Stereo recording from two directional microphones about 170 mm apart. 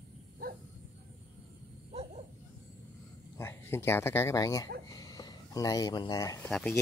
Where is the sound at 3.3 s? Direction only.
15° left (ahead or behind).